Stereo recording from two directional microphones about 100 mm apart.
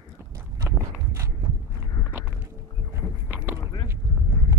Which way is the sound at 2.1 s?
20° right (ahead or behind).